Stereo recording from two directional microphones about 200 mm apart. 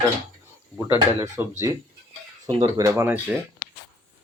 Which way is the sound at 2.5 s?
25° right (ahead or behind).